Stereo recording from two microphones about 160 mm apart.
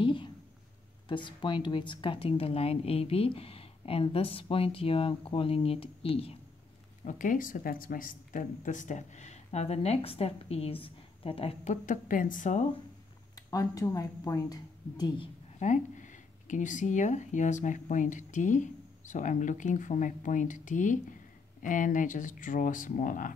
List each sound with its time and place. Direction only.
0.0 s a sound: 30° left (ahead or behind)
1.0 s speech: 30° left (ahead or behind)
7.1 s speech: 55° left (ahead or behind)
13.5 s a woman's voice: 20° left (ahead or behind)
15.6 s speech: 50° left (ahead or behind)